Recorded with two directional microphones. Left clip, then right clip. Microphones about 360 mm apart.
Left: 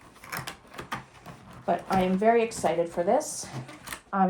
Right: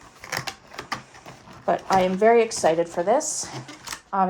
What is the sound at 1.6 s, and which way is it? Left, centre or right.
Speech, right.